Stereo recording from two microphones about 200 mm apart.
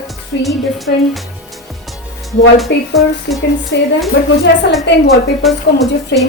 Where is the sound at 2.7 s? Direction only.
60° left (ahead or behind).